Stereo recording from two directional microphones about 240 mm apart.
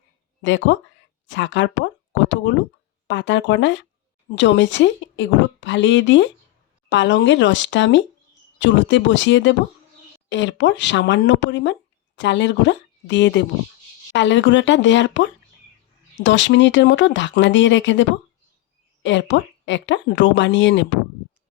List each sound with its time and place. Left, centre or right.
0.4 s a woman's voice: left
19.0 s a woman's voice: left